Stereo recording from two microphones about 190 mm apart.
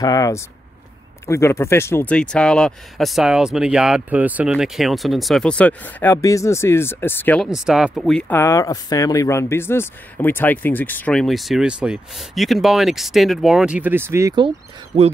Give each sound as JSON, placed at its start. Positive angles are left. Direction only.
{"t": 0.0, "sound": "speech", "side_deg": 20}
{"t": 7.4, "sound": "speech", "side_deg": 0}